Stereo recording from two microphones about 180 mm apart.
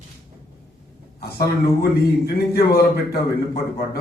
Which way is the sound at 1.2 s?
65° left (ahead or behind).